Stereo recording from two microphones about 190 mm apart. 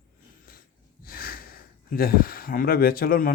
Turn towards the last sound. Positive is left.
turn(degrees=50)  # may be behind; listen again after turning